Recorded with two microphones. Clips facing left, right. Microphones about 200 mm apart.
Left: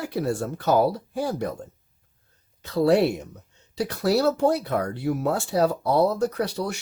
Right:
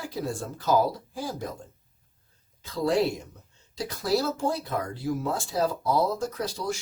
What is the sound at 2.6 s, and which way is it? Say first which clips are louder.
Speech: left 5 dB; 65° left (ahead or behind).